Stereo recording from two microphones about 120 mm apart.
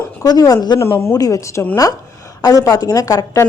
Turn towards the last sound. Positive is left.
turn(degrees=30)  # may be behind; listen again after turning